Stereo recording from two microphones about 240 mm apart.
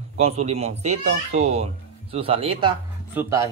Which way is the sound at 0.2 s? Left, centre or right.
Right.